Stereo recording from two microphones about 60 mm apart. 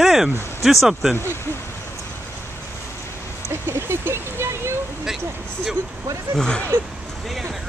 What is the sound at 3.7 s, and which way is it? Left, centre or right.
Speech, right.